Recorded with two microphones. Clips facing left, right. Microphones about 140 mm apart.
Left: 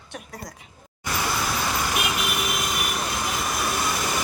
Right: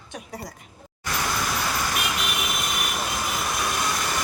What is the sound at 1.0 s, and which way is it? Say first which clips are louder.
Vehicle: left 1 dB; 10° left (ahead or behind).